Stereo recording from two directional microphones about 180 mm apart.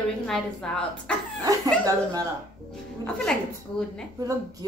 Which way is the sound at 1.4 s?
20° right (ahead or behind).